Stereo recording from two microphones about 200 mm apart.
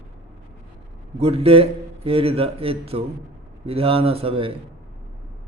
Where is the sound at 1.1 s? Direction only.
30° right (ahead or behind).